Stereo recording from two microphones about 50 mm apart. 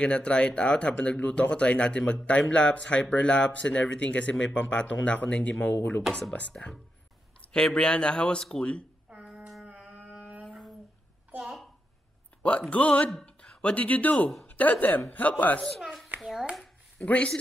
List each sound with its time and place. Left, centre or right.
0.0 s speech: left
6.5 s a man's voice: left
7.4 s speech: centre
9.7 s a sound: right
12.4 s a woman's voice: left
15.8 s a sound: centre
16.2 s hands: centre
17.0 s speech: left